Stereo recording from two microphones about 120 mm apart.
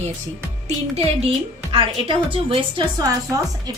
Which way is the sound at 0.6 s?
50° right (ahead or behind).